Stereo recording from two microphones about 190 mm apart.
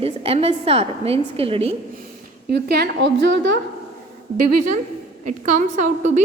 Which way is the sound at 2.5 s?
60° right (ahead or behind).